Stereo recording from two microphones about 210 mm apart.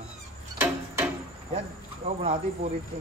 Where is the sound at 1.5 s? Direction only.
30° right (ahead or behind).